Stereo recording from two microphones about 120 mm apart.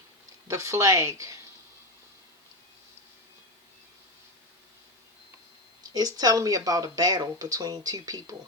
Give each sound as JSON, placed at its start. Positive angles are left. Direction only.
{"t": 0.4, "sound": "speech", "side_deg": -25}
{"t": 5.9, "sound": "speech", "side_deg": -35}